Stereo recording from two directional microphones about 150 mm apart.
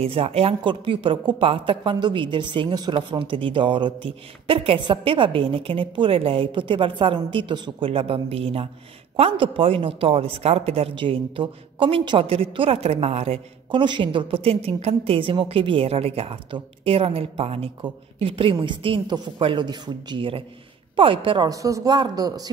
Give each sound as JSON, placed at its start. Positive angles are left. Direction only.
{"t": 0.0, "sound": "speech", "side_deg": -40}
{"t": 21.5, "sound": "speech", "side_deg": -20}